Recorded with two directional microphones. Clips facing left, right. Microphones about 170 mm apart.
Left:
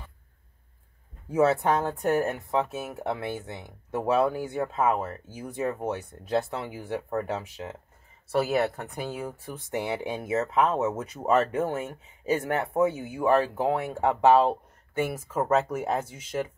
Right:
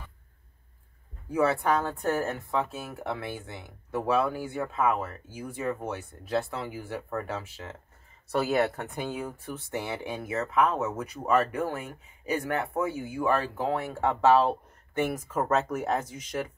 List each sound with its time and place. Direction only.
1.3 s speech: 20° left (ahead or behind)
8.3 s speech: 5° left (ahead or behind)
9.8 s speech: 20° left (ahead or behind)